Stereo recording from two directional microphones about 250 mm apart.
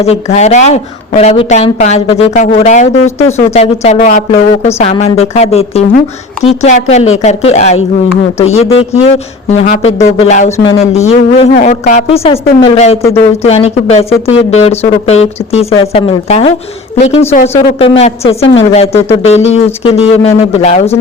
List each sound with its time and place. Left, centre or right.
0.0 s a woman's voice: left